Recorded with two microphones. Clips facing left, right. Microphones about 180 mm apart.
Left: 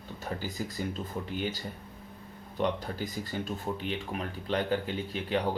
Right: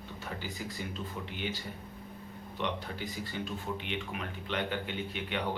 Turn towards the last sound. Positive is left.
turn(degrees=35)  # may be behind; listen again after turning